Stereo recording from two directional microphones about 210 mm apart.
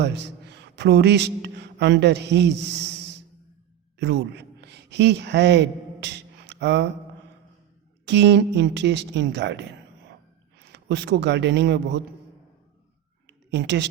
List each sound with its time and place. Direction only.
0.0 s a man's voice: 55° right (ahead or behind)
3.9 s a woman's voice: 55° right (ahead or behind)
8.0 s a man's voice: 55° right (ahead or behind)
13.2 s a sound: 55° right (ahead or behind)